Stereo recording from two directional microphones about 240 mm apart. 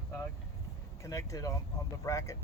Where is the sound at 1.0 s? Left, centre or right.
Centre.